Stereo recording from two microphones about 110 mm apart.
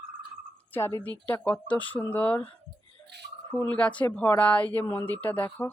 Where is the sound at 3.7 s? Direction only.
10° left (ahead or behind).